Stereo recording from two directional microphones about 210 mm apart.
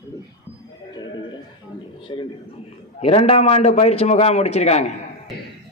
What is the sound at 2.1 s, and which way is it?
A man's voice, 20° left (ahead or behind).